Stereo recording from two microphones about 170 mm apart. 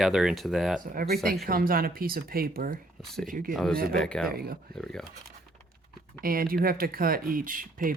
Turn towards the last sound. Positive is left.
turn(degrees=-55)  # may be behind; listen again after turning